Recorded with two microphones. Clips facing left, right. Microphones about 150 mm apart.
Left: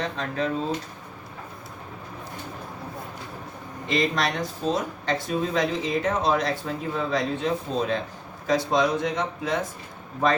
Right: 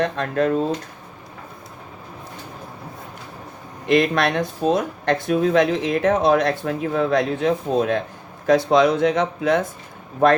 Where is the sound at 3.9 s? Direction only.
60° right (ahead or behind).